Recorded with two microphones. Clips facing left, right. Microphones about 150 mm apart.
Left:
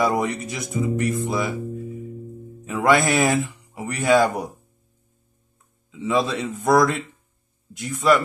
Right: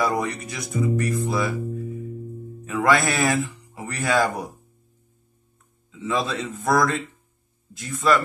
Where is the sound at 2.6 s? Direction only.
20° left (ahead or behind).